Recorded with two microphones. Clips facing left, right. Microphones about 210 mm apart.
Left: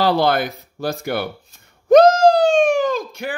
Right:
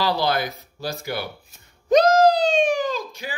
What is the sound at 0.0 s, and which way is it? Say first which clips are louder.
Speech: left 5 dB; 55° left (ahead or behind).